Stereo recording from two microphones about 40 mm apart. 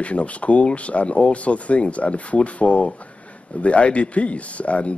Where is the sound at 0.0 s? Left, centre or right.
Left.